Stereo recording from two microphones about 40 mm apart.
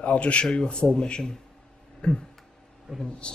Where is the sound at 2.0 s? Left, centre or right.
Left.